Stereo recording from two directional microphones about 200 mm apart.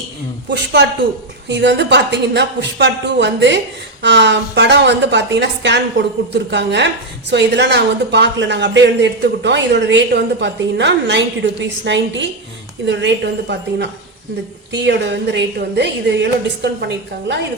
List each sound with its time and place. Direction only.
0.5 s a woman's voice: 60° right (ahead or behind)